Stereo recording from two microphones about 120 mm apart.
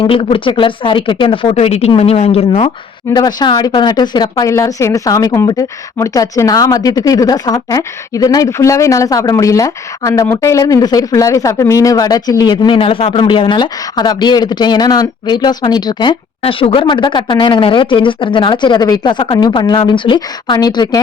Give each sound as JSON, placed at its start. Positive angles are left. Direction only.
{"t": 0.0, "sound": "speech", "side_deg": 50}
{"t": 1.5, "sound": "speech", "side_deg": 60}
{"t": 3.1, "sound": "speech", "side_deg": 35}